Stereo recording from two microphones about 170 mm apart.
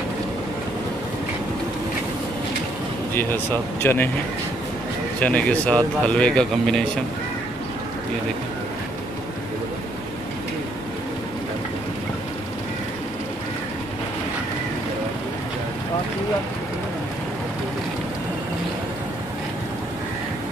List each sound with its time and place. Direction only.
3.8 s speech: 15° left (ahead or behind)
5.2 s speech: 10° left (ahead or behind)